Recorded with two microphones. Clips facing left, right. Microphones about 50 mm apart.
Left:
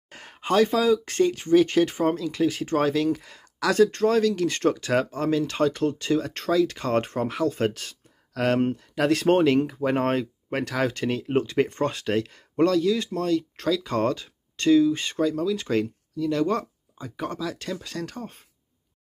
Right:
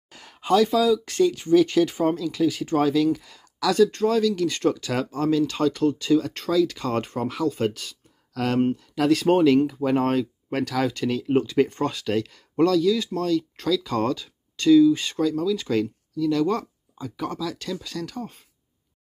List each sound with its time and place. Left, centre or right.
0.1 s speech: left
15.0 s speech: left